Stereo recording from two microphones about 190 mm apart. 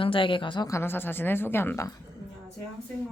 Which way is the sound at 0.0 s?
25° left (ahead or behind).